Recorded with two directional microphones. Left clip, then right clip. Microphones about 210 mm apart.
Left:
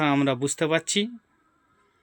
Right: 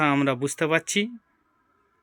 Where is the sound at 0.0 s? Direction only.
5° left (ahead or behind).